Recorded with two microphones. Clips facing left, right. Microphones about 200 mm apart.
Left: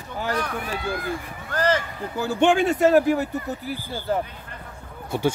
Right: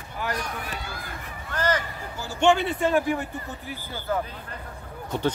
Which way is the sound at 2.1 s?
55° left (ahead or behind).